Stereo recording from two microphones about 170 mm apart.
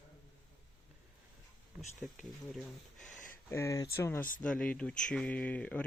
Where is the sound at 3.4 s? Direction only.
15° left (ahead or behind).